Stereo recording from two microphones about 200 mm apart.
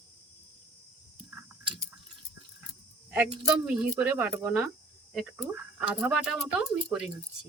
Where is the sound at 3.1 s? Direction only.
10° right (ahead or behind).